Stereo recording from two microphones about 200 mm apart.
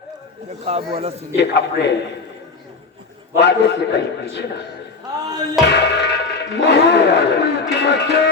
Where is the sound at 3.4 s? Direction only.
60° left (ahead or behind).